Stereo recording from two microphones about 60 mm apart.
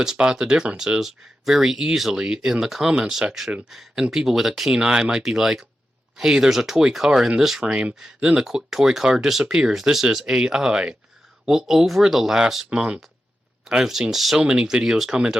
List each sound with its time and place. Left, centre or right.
0.0 s speech: centre
7.6 s speech: centre